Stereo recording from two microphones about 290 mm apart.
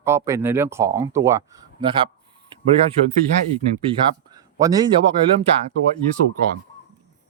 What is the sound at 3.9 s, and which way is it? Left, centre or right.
Speech, centre.